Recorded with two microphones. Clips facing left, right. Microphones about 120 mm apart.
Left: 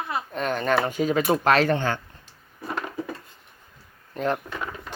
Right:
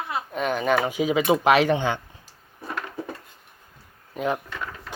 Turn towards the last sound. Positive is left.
turn(degrees=-5)  # may be behind; listen again after turning